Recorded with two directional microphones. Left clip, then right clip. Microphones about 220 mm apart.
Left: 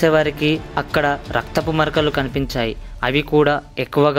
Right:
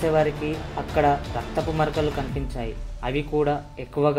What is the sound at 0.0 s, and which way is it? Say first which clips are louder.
Speech: left 6 dB; 35° left (ahead or behind).